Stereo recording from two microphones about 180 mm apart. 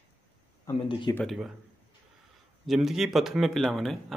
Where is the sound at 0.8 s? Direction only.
25° left (ahead or behind).